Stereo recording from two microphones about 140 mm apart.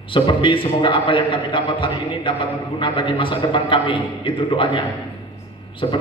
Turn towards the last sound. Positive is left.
turn(degrees=35)  # may be behind; listen again after turning